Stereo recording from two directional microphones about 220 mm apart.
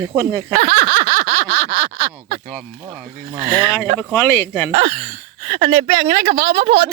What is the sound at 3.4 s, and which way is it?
Speech, 25° right (ahead or behind).